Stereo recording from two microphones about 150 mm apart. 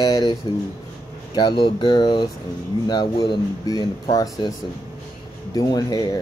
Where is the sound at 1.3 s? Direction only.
30° left (ahead or behind).